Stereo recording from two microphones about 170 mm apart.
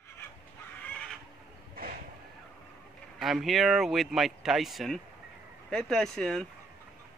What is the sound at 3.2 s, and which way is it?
Speech, centre (ahead or behind).